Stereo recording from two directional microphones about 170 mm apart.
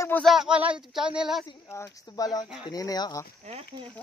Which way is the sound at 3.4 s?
35° right (ahead or behind).